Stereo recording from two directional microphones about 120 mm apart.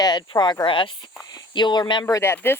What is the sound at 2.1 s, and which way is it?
Speech, 20° left (ahead or behind).